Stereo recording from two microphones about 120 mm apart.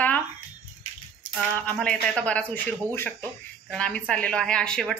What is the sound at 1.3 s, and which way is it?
Speech, 10° left (ahead or behind).